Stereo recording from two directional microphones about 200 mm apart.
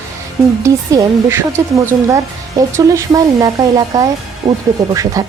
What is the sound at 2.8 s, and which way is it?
Speech, 15° right (ahead or behind).